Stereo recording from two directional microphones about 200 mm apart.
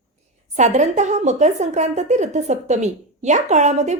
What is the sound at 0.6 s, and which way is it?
Speech, 35° right (ahead or behind).